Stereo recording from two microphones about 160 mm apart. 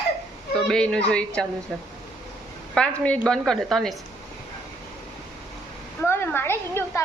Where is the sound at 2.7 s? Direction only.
5° left (ahead or behind).